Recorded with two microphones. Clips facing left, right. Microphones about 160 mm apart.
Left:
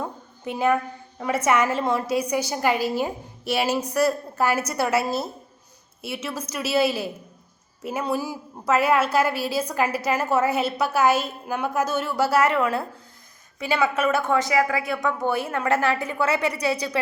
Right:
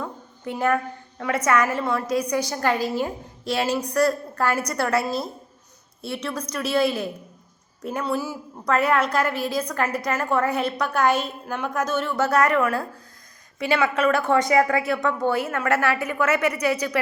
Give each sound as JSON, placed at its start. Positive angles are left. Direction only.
{"t": 0.0, "sound": "a sound", "side_deg": 20}
{"t": 1.5, "sound": "a woman's voice", "side_deg": 20}
{"t": 12.3, "sound": "a woman's voice", "side_deg": 25}
{"t": 13.6, "sound": "a woman's voice", "side_deg": 5}
{"t": 15.4, "sound": "a woman's voice", "side_deg": 30}